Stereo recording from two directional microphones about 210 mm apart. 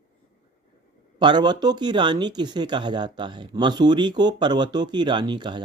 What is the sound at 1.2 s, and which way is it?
Speech, 20° right (ahead or behind).